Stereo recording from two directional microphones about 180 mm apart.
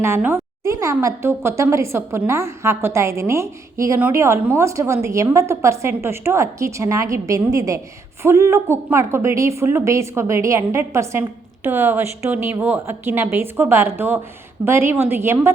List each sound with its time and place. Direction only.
0.0 s a woman's voice: 10° right (ahead or behind)